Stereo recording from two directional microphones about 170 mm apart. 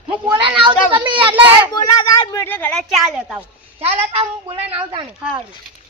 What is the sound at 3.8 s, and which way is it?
A woman's voice, 35° right (ahead or behind).